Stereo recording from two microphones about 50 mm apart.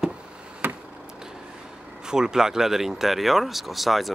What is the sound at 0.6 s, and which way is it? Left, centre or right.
Chop, right.